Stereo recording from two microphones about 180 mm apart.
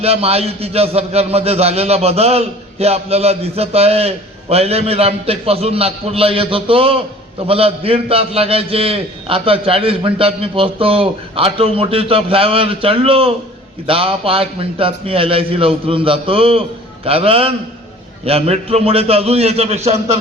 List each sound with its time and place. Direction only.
0.0 s a man's voice: 35° right (ahead or behind)